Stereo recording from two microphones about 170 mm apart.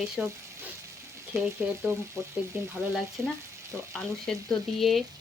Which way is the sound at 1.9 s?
15° right (ahead or behind).